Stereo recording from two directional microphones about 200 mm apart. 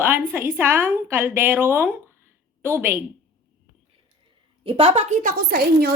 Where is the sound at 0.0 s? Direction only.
10° right (ahead or behind).